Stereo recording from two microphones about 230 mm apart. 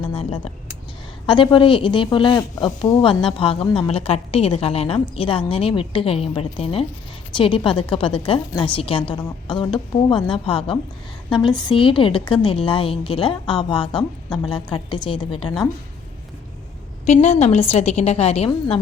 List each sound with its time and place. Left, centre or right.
0.1 s speech: left
17.1 s speech: left